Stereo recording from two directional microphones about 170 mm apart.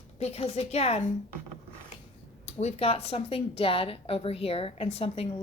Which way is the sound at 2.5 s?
40° left (ahead or behind).